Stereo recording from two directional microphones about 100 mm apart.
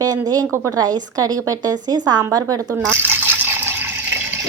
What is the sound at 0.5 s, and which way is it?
Speech, 30° right (ahead or behind).